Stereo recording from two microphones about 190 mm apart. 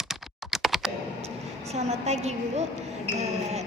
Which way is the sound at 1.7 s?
35° right (ahead or behind).